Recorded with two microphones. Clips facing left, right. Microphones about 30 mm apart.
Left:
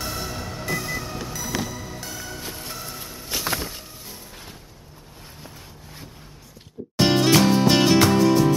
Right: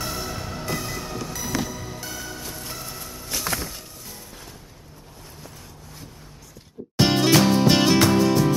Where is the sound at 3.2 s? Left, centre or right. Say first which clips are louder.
Left 1 dB; centre.